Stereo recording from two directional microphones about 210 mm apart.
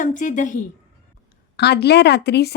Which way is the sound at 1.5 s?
50° left (ahead or behind).